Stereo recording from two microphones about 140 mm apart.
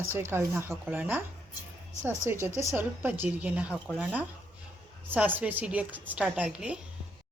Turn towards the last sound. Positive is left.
turn(degrees=-10)  # may be behind; listen again after turning